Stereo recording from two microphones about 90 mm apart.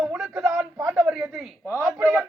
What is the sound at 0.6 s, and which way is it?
Speech, 5° right (ahead or behind).